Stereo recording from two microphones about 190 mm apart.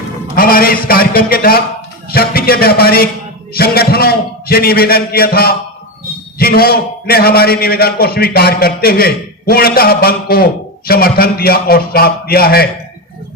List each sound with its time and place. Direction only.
0.3 s a man's voice: 50° left (ahead or behind)